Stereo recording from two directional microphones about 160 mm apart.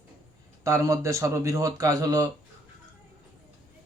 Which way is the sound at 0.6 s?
20° right (ahead or behind).